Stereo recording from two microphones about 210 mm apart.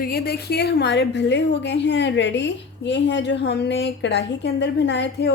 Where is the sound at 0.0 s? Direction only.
45° left (ahead or behind).